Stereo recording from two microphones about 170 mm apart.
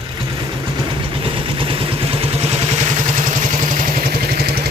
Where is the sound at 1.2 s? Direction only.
30° right (ahead or behind); by 3.8 s 50° right (ahead or behind).